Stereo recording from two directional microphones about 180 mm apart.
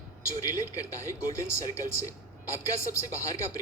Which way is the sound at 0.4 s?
15° left (ahead or behind).